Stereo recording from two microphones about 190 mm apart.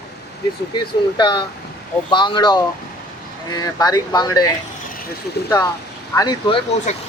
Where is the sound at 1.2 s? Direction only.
25° left (ahead or behind).